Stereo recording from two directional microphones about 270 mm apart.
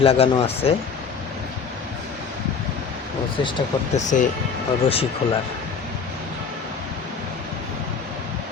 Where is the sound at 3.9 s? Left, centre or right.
Left.